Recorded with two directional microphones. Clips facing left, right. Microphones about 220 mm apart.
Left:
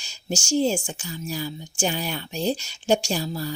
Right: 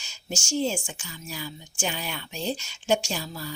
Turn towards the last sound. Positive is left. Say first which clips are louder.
# left 6 dB
turn(degrees=35)  # may be behind; listen again after turning